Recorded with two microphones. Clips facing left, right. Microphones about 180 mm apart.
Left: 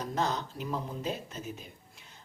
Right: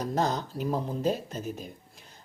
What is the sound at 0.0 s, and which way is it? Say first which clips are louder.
Speech: right 4 dB; 40° right (ahead or behind).